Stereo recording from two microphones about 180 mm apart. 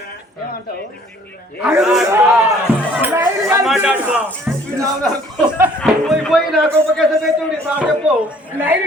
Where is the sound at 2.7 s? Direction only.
30° left (ahead or behind).